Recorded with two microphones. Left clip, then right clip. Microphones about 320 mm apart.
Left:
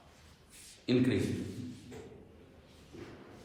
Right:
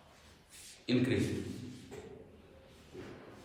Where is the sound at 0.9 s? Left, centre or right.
Centre.